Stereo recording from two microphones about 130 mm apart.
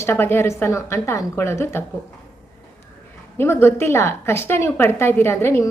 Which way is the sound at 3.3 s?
20° left (ahead or behind).